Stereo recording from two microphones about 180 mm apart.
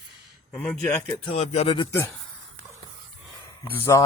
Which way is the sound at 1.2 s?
35° left (ahead or behind).